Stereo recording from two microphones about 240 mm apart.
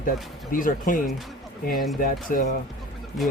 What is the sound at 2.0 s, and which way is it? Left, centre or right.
Speech, left.